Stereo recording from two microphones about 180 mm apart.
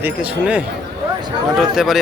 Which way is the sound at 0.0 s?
10° right (ahead or behind).